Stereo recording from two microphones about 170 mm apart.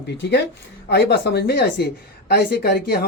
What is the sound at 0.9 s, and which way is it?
A woman's voice, 75° left (ahead or behind).